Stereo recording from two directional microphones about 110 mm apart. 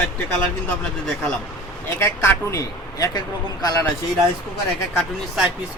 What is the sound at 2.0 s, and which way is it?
Speech, 25° left (ahead or behind).